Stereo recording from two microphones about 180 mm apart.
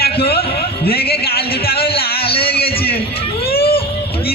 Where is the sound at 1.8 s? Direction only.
30° left (ahead or behind).